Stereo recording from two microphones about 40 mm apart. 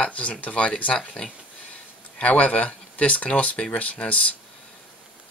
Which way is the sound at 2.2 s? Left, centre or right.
Left.